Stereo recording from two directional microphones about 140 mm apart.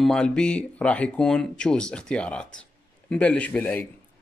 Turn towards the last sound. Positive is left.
turn(degrees=10)  # may be behind; listen again after turning